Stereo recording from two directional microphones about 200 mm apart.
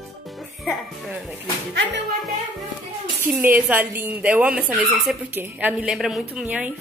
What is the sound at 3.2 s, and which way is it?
Speech, 10° right (ahead or behind).